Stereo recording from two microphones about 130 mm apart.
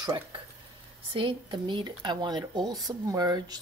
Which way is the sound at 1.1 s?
40° right (ahead or behind).